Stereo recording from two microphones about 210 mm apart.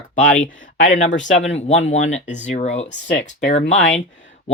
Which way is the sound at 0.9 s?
35° left (ahead or behind).